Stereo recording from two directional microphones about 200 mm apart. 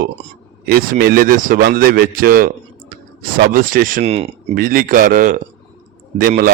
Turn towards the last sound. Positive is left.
turn(degrees=-45)  # may be behind; listen again after turning